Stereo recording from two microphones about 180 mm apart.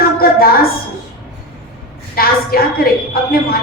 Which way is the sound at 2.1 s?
55° left (ahead or behind).